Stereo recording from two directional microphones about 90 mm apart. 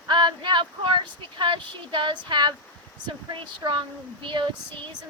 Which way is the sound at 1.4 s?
65° right (ahead or behind).